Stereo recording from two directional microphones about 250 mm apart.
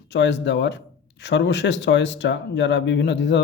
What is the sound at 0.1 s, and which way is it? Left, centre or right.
Speech, left.